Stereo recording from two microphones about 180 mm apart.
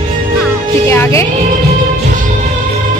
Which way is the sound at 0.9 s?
15° left (ahead or behind).